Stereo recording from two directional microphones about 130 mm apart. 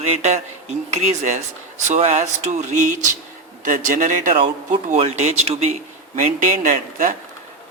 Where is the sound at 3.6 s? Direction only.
90° right.